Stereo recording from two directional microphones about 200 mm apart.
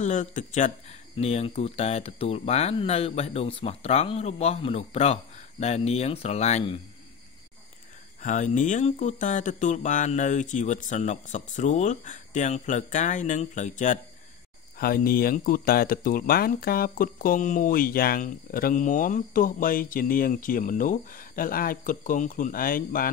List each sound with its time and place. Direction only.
0.0 s speech: 40° left (ahead or behind)
8.2 s speech: 40° left (ahead or behind)